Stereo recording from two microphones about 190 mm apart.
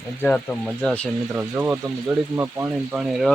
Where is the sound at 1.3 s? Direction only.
10° right (ahead or behind).